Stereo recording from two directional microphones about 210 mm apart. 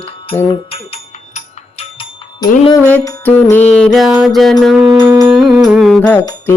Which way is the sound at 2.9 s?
5° left (ahead or behind).